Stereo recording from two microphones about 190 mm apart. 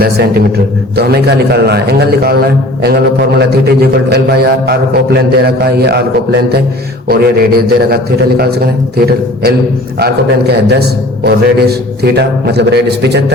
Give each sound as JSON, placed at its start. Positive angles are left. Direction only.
{"t": 0.0, "sound": "a man's voice", "side_deg": -55}